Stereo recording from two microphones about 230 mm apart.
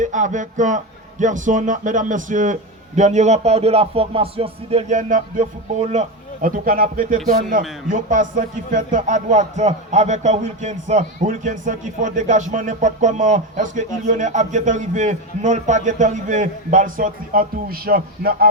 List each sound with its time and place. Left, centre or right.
0.0 s a man's voice: right